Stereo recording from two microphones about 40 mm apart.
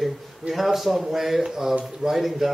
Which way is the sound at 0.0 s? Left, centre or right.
Centre.